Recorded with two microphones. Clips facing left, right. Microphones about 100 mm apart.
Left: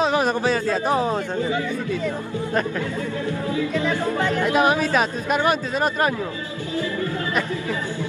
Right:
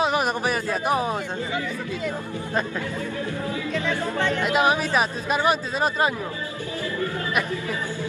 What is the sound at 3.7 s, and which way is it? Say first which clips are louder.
Music: left 1 dB; 30° left (ahead or behind).